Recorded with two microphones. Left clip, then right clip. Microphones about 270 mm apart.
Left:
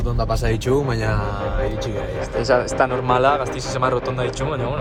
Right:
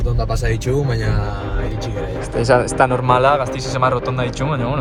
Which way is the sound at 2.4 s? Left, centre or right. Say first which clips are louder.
Right 4 dB; centre.